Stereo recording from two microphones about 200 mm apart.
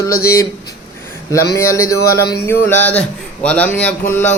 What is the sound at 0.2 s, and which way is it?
A man's voice, 15° left (ahead or behind).